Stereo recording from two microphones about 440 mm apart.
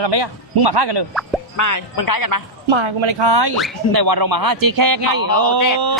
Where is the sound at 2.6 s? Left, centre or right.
Right.